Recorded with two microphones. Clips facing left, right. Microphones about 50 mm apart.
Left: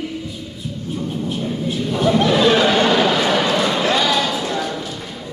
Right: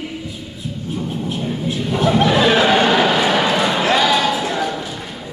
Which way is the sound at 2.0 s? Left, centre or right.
Right.